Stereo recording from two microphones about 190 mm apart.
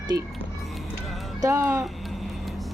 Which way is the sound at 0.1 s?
55° right (ahead or behind).